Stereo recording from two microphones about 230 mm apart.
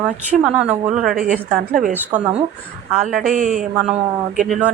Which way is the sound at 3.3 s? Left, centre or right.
Right.